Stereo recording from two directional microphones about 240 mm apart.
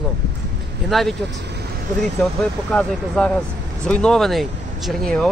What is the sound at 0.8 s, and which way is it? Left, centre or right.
Speech, centre.